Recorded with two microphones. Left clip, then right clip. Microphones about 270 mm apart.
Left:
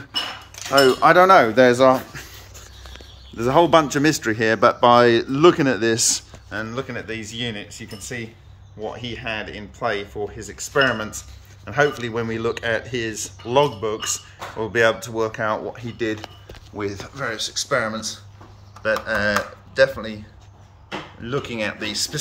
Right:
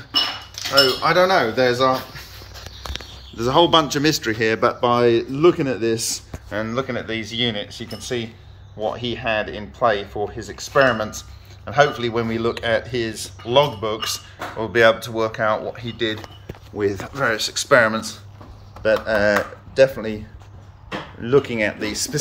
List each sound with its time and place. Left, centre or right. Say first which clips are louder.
0.7 s speech: left 3 dB; left
3.3 s speech: even; centre
16.7 s speech: right 6 dB; centre
21.2 s speech: right 8 dB; centre